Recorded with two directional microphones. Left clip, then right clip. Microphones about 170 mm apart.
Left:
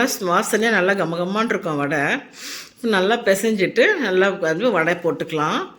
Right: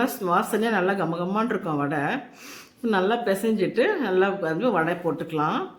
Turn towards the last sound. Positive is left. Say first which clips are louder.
# left 4 dB
turn(degrees=5)  # may be behind; listen again after turning